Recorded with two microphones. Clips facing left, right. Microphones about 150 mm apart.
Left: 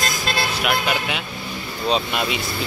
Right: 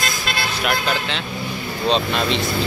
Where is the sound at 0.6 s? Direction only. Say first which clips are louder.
Right 1 dB; 10° left (ahead or behind).